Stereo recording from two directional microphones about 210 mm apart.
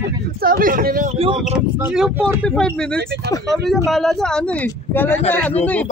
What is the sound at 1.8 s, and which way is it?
Speech, 5° right (ahead or behind).